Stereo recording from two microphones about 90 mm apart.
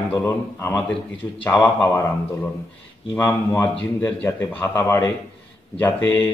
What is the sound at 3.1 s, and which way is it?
A man's voice, 35° left (ahead or behind).